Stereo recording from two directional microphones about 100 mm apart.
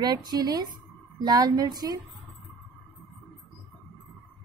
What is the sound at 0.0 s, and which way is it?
A woman's voice, 45° right (ahead or behind).